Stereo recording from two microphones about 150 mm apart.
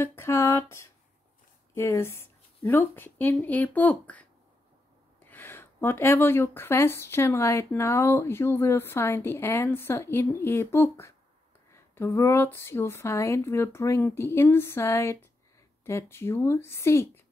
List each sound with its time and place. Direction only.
0.0 s speech: 15° left (ahead or behind)
1.8 s speech: 20° left (ahead or behind)
5.3 s speech: 15° left (ahead or behind)